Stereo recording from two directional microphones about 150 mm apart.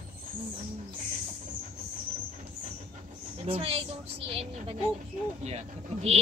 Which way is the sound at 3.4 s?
40° right (ahead or behind).